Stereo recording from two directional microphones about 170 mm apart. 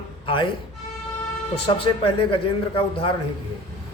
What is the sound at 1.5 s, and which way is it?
A man's voice, 30° left (ahead or behind).